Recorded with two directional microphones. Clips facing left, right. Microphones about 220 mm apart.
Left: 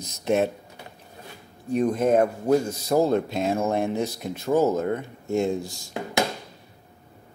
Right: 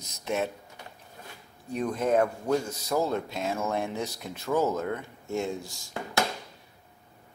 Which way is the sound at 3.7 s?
50° left (ahead or behind).